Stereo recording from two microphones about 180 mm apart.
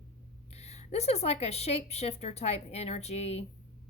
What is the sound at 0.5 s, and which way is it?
Speech, 35° left (ahead or behind).